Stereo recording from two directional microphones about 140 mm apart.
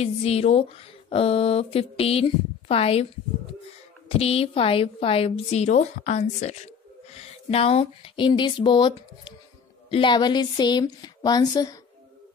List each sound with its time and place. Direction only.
0.0 s a woman's voice: 45° left (ahead or behind)
4.1 s a woman's voice: 45° left (ahead or behind); by 11.7 s 30° left (ahead or behind)